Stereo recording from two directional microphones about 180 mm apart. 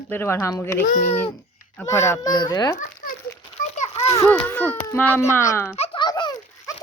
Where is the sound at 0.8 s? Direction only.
45° left (ahead or behind).